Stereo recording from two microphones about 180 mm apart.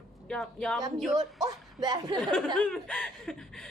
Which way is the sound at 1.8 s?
20° right (ahead or behind).